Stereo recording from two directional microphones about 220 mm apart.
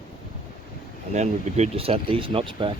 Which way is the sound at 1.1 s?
30° right (ahead or behind).